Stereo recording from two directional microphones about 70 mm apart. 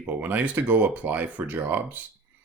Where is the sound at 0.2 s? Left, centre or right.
Right.